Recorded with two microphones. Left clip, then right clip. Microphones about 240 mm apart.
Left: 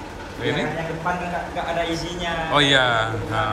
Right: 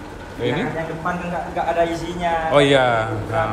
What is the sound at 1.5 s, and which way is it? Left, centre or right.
Speech, right.